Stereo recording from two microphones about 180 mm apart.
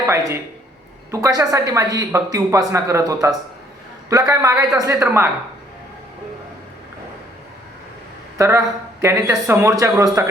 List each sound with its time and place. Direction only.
0.0 s speech: 15° right (ahead or behind)
8.4 s speech: 15° right (ahead or behind)